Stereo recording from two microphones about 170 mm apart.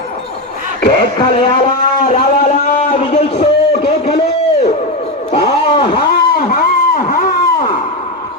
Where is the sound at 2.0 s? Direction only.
50° left (ahead or behind); by 4.2 s 35° left (ahead or behind).